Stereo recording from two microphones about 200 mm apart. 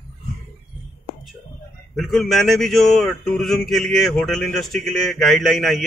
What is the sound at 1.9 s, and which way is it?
Speech, centre (ahead or behind).